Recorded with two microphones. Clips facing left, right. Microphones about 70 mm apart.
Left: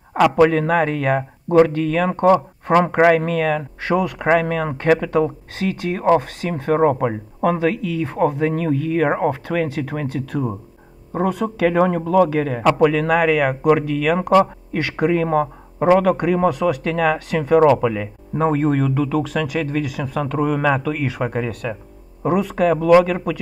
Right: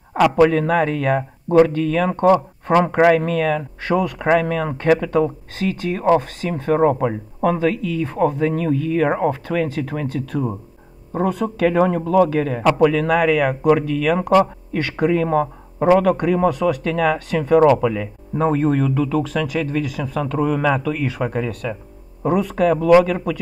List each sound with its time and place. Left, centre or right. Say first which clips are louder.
0.4 s a man's voice: right 1 dB; left
10.3 s speech: even; centre
11.2 s speech: even; left
11.6 s a man's voice: even; left
17.6 s speech: even; left
21.2 s a man's voice: even; left
22.2 s speech: even; left